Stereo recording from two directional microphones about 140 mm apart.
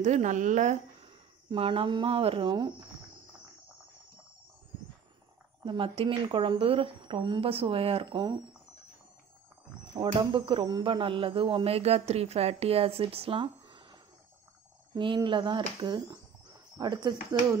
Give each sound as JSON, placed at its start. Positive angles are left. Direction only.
{"t": 0.0, "sound": "a woman's voice", "side_deg": -60}
{"t": 1.5, "sound": "speech", "side_deg": -40}
{"t": 5.6, "sound": "speech", "side_deg": -35}
{"t": 9.9, "sound": "speech", "side_deg": -35}
{"t": 15.0, "sound": "speech", "side_deg": -35}